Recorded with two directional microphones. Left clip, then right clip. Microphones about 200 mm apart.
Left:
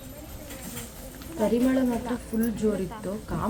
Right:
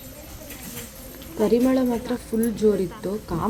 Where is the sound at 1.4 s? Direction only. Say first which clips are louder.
Right 4 dB; 15° right (ahead or behind).